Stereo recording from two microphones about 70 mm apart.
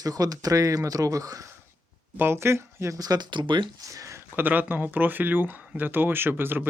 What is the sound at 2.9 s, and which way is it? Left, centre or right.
Speech, right.